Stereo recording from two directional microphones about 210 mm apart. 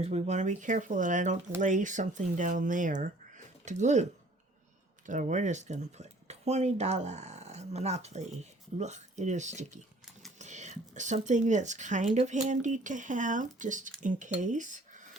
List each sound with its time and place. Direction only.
0.0 s speech: 30° right (ahead or behind)
5.0 s speech: 35° right (ahead or behind)